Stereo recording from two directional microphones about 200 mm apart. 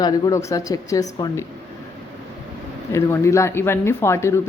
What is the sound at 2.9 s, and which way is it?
Speech, 15° left (ahead or behind).